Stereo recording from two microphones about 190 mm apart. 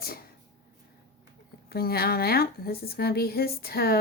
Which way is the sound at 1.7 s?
55° left (ahead or behind).